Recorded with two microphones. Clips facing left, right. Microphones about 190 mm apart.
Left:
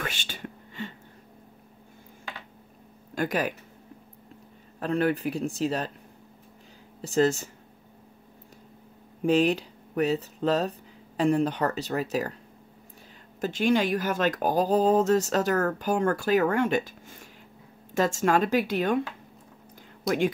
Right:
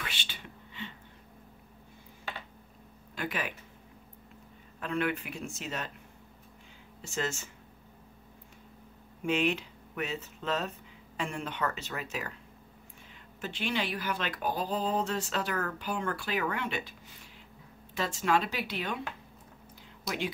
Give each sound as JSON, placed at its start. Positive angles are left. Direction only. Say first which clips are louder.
{"t": 0.0, "sound": "whispering", "louder": "left 8 dB", "side_deg": 45}
{"t": 3.2, "sound": "speech", "louder": "left 8 dB", "side_deg": 40}
{"t": 4.7, "sound": "speech", "louder": "left 7 dB", "side_deg": 35}
{"t": 7.0, "sound": "speech", "louder": "left 12 dB", "side_deg": 35}
{"t": 9.2, "sound": "speech", "louder": "left 7 dB", "side_deg": 35}
{"t": 13.4, "sound": "speech", "louder": "left 10 dB", "side_deg": 45}
{"t": 20.1, "sound": "speech", "louder": "left 10 dB", "side_deg": 50}